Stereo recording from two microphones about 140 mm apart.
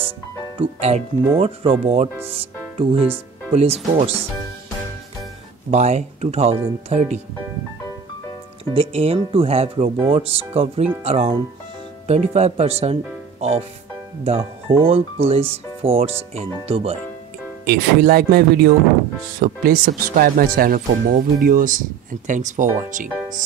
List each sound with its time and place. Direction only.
0.6 s speech: 50° right (ahead or behind)
5.7 s speech: 50° right (ahead or behind)
8.7 s speech: 40° right (ahead or behind)
17.6 s speech: 90° right; by 23.0 s 65° right (ahead or behind)